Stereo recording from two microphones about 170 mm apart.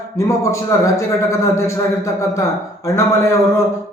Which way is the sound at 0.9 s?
15° left (ahead or behind).